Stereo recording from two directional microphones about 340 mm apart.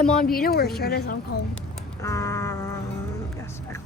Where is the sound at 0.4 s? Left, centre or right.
Left.